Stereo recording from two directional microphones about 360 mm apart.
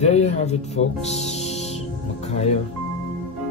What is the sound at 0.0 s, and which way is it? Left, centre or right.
Speech, centre.